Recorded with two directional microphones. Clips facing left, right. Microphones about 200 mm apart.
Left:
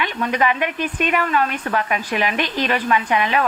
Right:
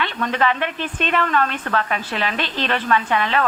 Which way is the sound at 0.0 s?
15° left (ahead or behind).